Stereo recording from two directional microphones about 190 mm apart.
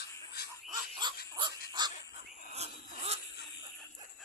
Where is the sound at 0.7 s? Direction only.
25° right (ahead or behind).